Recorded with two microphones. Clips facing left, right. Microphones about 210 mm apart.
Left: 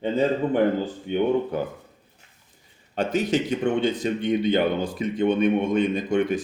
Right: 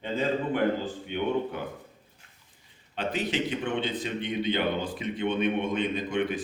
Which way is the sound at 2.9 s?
45° left (ahead or behind).